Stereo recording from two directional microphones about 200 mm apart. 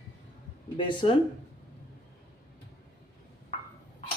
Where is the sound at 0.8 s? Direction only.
25° left (ahead or behind).